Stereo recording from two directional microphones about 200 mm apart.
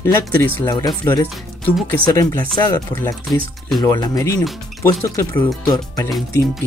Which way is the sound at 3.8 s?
20° left (ahead or behind).